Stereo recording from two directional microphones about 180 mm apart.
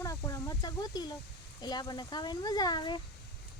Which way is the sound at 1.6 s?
25° left (ahead or behind).